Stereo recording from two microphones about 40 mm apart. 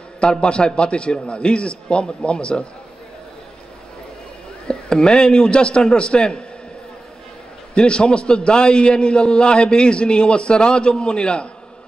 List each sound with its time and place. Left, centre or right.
0.2 s a man's voice: left
4.6 s a man's voice: left
7.7 s a man's voice: left